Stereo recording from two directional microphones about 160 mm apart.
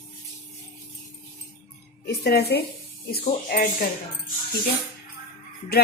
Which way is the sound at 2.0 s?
80° left.